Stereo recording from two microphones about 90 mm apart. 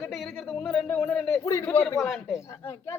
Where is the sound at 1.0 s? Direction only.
10° left (ahead or behind).